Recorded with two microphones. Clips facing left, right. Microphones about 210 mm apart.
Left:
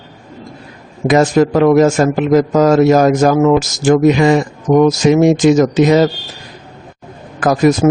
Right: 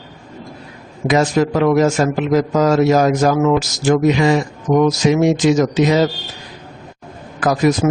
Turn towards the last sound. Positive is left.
turn(degrees=50)  # may be behind; listen again after turning